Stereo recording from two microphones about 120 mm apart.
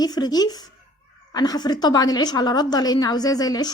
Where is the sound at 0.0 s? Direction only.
35° left (ahead or behind).